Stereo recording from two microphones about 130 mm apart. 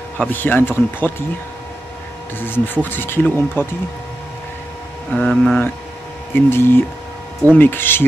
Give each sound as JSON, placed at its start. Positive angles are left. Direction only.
{"t": 0.2, "sound": "speech", "side_deg": 15}
{"t": 2.3, "sound": "speech", "side_deg": 15}
{"t": 5.1, "sound": "speech", "side_deg": 5}
{"t": 6.3, "sound": "speech", "side_deg": 15}